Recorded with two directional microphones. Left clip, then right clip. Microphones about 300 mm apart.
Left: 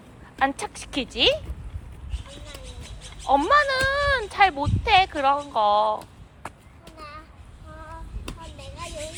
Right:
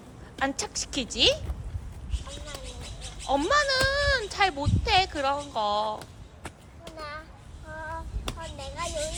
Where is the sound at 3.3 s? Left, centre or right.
Centre.